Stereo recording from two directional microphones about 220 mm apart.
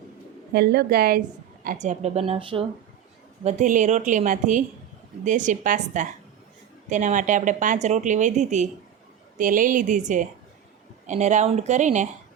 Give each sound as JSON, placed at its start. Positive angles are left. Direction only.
{"t": 0.5, "sound": "a woman's voice", "side_deg": -45}
{"t": 1.6, "sound": "speech", "side_deg": -35}